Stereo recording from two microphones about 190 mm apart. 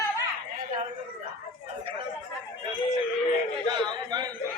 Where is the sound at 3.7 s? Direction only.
20° right (ahead or behind).